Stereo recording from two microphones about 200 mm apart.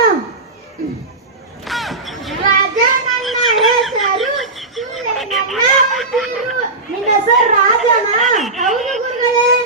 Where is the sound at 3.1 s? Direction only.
Centre (ahead or behind).